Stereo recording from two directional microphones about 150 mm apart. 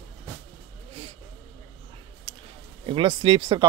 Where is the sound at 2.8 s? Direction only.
35° right (ahead or behind).